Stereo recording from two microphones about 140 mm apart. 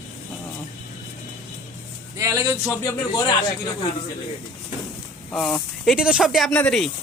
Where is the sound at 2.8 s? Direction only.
25° left (ahead or behind).